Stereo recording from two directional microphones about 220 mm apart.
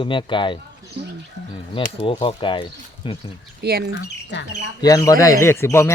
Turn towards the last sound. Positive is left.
turn(degrees=10)  # may be behind; listen again after turning